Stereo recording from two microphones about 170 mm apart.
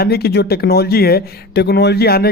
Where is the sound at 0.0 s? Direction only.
70° left (ahead or behind).